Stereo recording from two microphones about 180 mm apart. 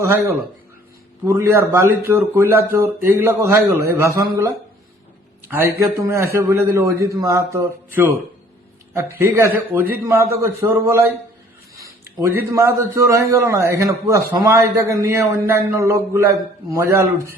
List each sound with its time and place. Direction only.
0.0 s a man's voice: 15° right (ahead or behind)
12.2 s a man's voice: 15° right (ahead or behind)